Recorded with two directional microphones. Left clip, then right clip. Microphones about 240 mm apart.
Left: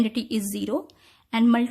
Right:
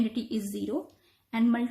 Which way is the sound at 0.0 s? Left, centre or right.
Left.